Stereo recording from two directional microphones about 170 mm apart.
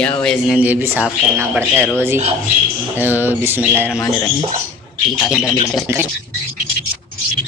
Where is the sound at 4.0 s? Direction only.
20° left (ahead or behind).